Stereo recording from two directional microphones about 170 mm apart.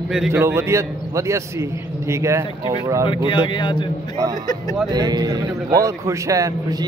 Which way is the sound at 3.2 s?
30° left (ahead or behind).